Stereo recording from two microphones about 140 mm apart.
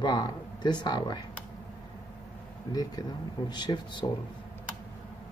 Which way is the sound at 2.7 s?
30° left (ahead or behind).